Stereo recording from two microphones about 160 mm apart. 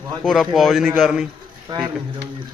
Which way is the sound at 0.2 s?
Centre (ahead or behind).